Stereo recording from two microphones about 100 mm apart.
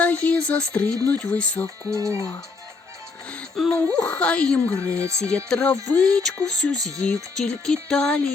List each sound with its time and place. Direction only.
0.0 s speech: 15° left (ahead or behind)
3.5 s speech: centre (ahead or behind)
3.8 s speech: 10° left (ahead or behind)
5.0 s speech: 30° right (ahead or behind)
5.5 s speech: 10° left (ahead or behind)